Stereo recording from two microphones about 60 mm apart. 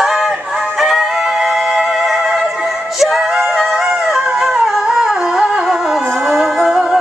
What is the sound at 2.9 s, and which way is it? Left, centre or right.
Singing, centre.